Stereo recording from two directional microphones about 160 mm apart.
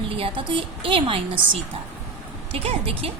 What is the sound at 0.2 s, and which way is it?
A woman's voice, 30° right (ahead or behind).